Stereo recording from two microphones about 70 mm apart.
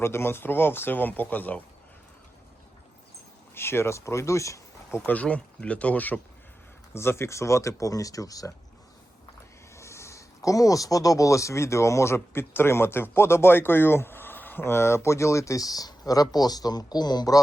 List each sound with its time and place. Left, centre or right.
0.0 s speech: left
3.5 s speech: left
5.0 s speech: centre
6.9 s speech: left
9.7 s speech: left